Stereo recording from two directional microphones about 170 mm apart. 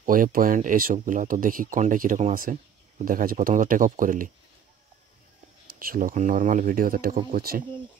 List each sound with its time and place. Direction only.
0.0 s speech: 55° right (ahead or behind)
5.7 s speech: 55° right (ahead or behind)